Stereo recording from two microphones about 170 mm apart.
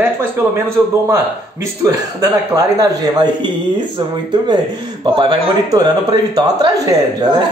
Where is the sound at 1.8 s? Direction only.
20° right (ahead or behind).